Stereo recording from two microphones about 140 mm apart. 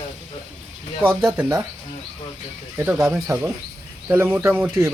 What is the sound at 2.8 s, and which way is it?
Speech, 15° right (ahead or behind).